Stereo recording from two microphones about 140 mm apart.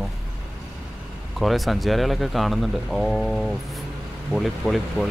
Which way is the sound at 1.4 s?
Centre (ahead or behind).